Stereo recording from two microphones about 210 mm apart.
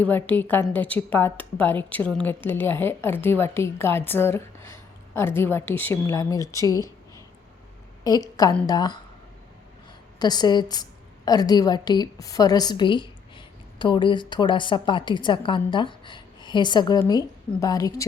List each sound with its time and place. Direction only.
0.0 s a woman's voice: 10° left (ahead or behind)
8.0 s a woman's voice: 15° left (ahead or behind)
10.2 s a woman's voice: 20° left (ahead or behind)